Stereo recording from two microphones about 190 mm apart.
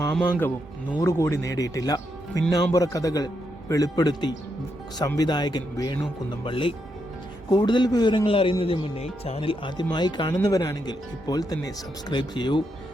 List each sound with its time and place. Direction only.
0.1 s a man's voice: 10° left (ahead or behind)